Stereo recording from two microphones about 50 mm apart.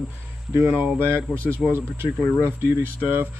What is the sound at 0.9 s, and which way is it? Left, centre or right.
Speech, right.